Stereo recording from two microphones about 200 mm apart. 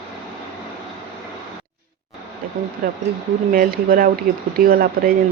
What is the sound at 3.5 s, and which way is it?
Speech, 45° right (ahead or behind).